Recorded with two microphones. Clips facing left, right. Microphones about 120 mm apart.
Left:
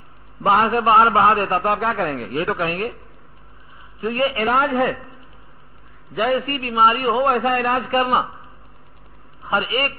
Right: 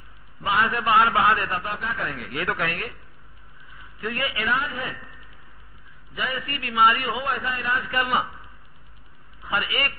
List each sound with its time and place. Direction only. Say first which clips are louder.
0.4 s a man's voice: left 7 dB; 45° left (ahead or behind)
0.7 s speech: left 3 dB; 30° left (ahead or behind)
1.0 s a man's voice: left 5 dB; 40° left (ahead or behind)
2.0 s speech: left 6 dB; 30° left (ahead or behind)
2.7 s speech: left 9 dB; 40° left (ahead or behind)
4.2 s a man's voice: left 9 dB; 45° left (ahead or behind)
6.1 s a man's voice: left 11 dB; 45° left (ahead or behind)
9.5 s speech: left 6 dB; 40° left (ahead or behind)